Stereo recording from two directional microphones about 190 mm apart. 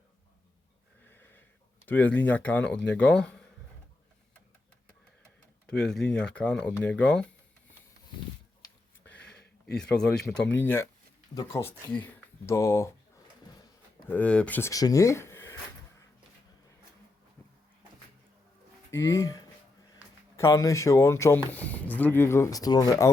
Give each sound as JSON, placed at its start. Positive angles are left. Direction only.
{"t": 1.0, "sound": "wheeze", "side_deg": 10}
{"t": 1.9, "sound": "speech", "side_deg": 10}
{"t": 5.6, "sound": "speech", "side_deg": 5}
{"t": 9.0, "sound": "a sound", "side_deg": 5}
{"t": 10.5, "sound": "speech", "side_deg": 10}
{"t": 14.1, "sound": "speech", "side_deg": 5}
{"t": 18.9, "sound": "speech", "side_deg": 15}